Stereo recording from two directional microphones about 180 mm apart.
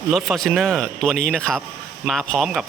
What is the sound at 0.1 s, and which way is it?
Speech, centre (ahead or behind).